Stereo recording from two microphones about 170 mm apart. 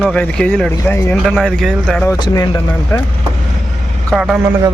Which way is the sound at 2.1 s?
25° left (ahead or behind).